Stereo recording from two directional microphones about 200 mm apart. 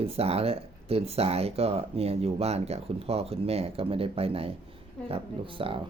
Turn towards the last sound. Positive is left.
turn(degrees=-25)  # may be behind; listen again after turning